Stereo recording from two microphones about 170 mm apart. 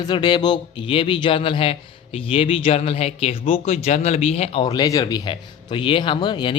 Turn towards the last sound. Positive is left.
turn(degrees=25)  # may be behind; listen again after turning